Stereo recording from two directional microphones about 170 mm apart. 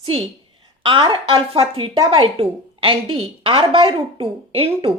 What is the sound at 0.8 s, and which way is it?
A woman's voice, 30° right (ahead or behind).